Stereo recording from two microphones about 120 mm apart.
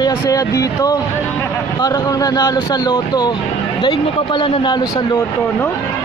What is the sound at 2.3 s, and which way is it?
Speech, 35° left (ahead or behind).